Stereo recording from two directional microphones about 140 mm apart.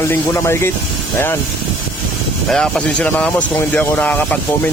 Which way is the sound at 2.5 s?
5° left (ahead or behind).